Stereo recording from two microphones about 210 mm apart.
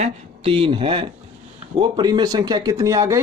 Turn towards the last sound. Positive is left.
turn(degrees=-15)  # may be behind; listen again after turning